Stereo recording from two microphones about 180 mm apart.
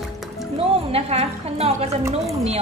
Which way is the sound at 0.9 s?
35° right (ahead or behind).